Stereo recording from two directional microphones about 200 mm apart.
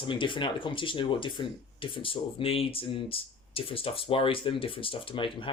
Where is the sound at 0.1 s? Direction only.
25° left (ahead or behind).